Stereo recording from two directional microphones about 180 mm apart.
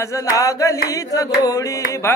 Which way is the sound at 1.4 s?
20° left (ahead or behind).